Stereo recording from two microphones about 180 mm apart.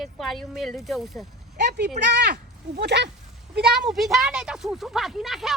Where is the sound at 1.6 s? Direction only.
70° right (ahead or behind).